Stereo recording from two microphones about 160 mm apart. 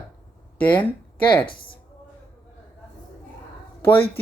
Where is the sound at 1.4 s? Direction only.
30° left (ahead or behind).